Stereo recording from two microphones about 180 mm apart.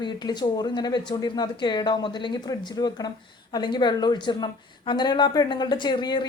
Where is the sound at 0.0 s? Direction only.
25° left (ahead or behind).